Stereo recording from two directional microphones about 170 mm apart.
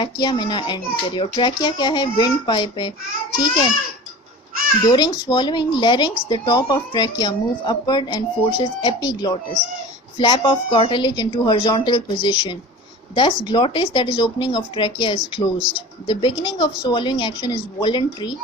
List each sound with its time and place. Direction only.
0.0 s speech: 25° left (ahead or behind)
4.9 s speech: 25° left (ahead or behind)